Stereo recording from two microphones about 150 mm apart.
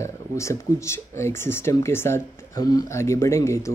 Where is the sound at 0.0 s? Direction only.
20° left (ahead or behind).